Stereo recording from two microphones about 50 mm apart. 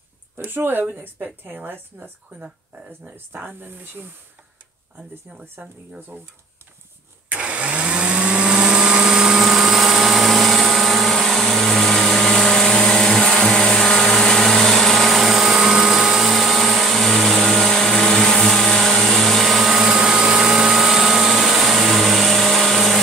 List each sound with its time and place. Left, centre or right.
0.5 s a woman's voice: right
5.4 s a woman's voice: right
7.2 s a sound: right; by 12.6 s centre
12.8 s vehicle: centre
19.8 s vehicle: centre